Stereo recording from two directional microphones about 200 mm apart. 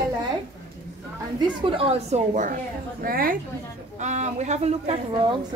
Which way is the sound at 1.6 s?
30° right (ahead or behind).